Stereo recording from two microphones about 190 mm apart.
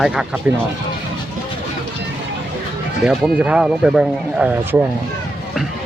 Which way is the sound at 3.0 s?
5° right (ahead or behind).